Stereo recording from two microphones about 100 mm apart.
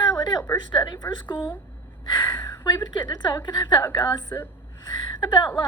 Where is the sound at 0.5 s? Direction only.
45° left (ahead or behind).